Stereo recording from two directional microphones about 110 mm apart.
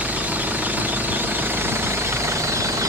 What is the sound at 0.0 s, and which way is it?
Engine knocking, 15° right (ahead or behind).